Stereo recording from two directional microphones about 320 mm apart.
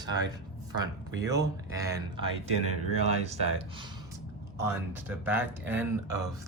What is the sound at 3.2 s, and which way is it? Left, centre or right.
Speech, centre.